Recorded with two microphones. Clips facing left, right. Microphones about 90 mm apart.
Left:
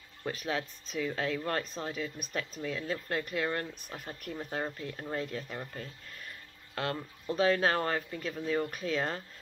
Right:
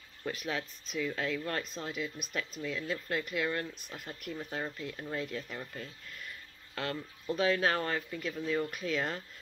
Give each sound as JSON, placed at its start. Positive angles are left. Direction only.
{"t": 0.3, "sound": "speech", "side_deg": 35}
{"t": 6.7, "sound": "speech", "side_deg": 35}